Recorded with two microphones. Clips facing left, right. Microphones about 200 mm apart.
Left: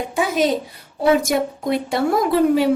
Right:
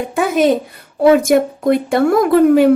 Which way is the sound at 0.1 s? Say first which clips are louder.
Right 6 dB; 55° right (ahead or behind).